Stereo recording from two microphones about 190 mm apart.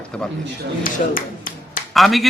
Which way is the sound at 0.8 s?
45° left (ahead or behind).